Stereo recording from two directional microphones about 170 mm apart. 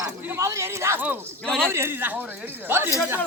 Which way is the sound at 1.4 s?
5° left (ahead or behind).